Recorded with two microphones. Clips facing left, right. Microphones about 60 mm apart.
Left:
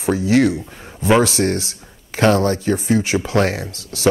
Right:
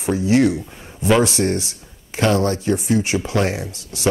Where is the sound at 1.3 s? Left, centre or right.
Left.